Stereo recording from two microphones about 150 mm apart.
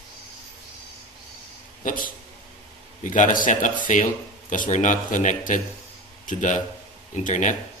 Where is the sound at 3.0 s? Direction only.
60° left (ahead or behind).